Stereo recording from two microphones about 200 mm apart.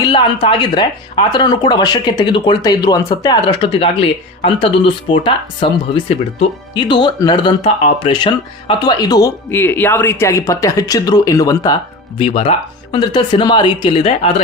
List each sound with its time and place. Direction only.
0.1 s speech: 30° left (ahead or behind)